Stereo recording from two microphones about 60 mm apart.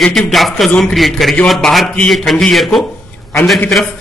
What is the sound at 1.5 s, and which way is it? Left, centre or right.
Speech, centre.